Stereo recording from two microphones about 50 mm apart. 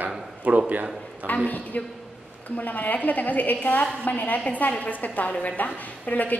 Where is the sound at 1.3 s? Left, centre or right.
Left.